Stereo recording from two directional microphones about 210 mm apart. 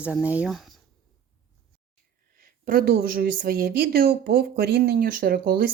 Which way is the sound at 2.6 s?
45° right (ahead or behind).